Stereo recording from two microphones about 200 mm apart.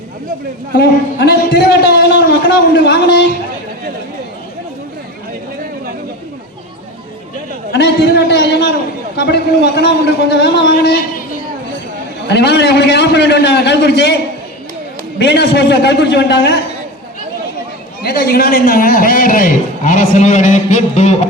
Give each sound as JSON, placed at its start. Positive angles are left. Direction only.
{"t": 0.8, "sound": "a man's voice", "side_deg": 55}
{"t": 7.7, "sound": "a sound", "side_deg": 55}
{"t": 9.1, "sound": "a man's voice", "side_deg": 55}
{"t": 12.3, "sound": "a man's voice", "side_deg": 55}
{"t": 15.2, "sound": "a man's voice", "side_deg": 60}
{"t": 18.0, "sound": "a man's voice", "side_deg": 50}